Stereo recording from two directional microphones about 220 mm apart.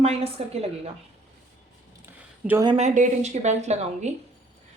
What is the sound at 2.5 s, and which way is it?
Speech, 15° right (ahead or behind).